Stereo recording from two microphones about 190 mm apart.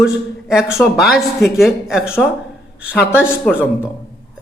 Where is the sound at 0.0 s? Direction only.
5° right (ahead or behind).